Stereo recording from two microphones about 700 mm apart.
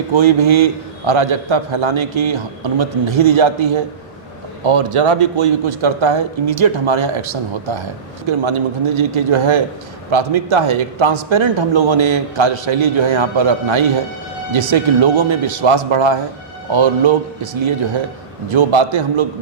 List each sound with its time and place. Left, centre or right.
0.1 s a man's voice: right
4.6 s a man's voice: right
9.0 s a man's voice: right